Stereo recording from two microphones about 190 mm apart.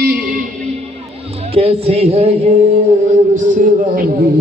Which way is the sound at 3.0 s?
40° right (ahead or behind).